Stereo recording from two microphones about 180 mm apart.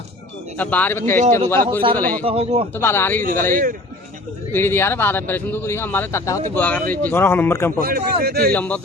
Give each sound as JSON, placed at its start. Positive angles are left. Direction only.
{"t": 0.5, "sound": "a man's voice", "side_deg": 10}
{"t": 1.2, "sound": "a man's voice", "side_deg": -40}
{"t": 1.5, "sound": "a man's voice", "side_deg": 10}
{"t": 2.2, "sound": "a man's voice", "side_deg": -35}
{"t": 2.7, "sound": "a man's voice", "side_deg": 15}
{"t": 3.5, "sound": "speech", "side_deg": -50}
{"t": 4.5, "sound": "a man's voice", "side_deg": 15}
{"t": 7.8, "sound": "a man's voice", "side_deg": -55}
{"t": 8.5, "sound": "a man's voice", "side_deg": 10}